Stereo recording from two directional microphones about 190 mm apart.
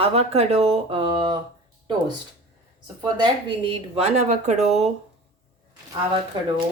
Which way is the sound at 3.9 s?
35° right (ahead or behind).